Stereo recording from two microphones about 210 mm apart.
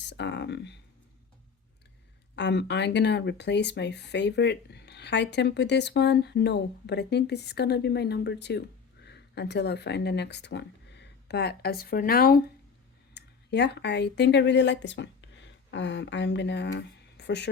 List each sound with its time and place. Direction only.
0.0 s speech: 55° left (ahead or behind)
2.3 s speech: 55° left (ahead or behind)